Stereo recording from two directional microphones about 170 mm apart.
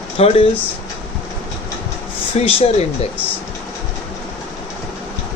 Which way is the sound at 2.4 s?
35° left (ahead or behind).